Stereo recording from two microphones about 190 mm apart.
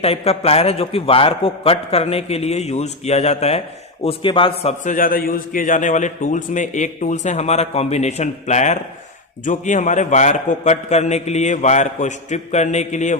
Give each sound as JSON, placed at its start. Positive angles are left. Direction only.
{"t": 0.0, "sound": "a man's voice", "side_deg": 30}
{"t": 4.9, "sound": "a man's voice", "side_deg": 45}